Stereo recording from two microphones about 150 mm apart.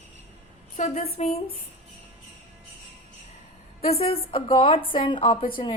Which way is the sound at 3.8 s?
40° left (ahead or behind).